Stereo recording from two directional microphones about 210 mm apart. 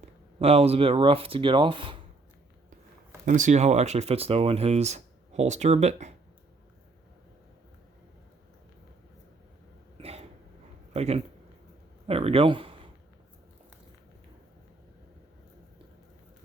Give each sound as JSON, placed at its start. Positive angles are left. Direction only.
{"t": 0.3, "sound": "speech", "side_deg": -30}
{"t": 3.2, "sound": "speech", "side_deg": -35}
{"t": 10.0, "sound": "a sound", "side_deg": -30}
{"t": 10.9, "sound": "speech", "side_deg": -30}